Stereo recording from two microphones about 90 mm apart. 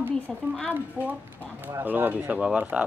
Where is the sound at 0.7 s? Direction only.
20° right (ahead or behind).